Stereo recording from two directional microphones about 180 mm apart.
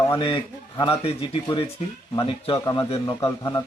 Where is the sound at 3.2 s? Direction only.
20° left (ahead or behind).